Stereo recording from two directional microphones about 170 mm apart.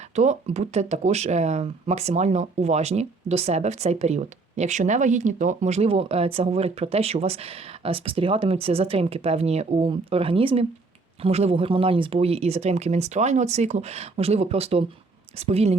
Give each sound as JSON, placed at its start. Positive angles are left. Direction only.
{"t": 0.2, "sound": "speech", "side_deg": -40}